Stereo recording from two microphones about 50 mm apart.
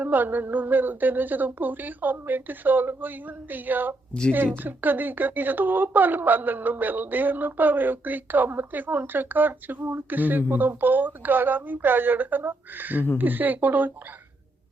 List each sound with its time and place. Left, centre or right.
0.0 s speech: right